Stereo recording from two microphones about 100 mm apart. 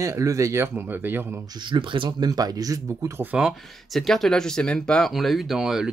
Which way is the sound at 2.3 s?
40° right (ahead or behind).